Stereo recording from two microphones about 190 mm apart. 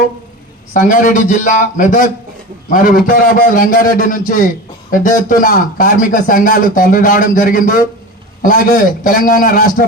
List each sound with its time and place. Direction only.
0.7 s a man's voice: 45° left (ahead or behind)